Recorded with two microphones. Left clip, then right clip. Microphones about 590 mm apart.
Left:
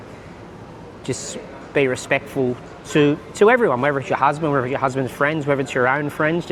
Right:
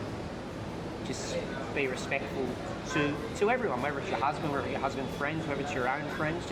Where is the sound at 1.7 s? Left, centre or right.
Left.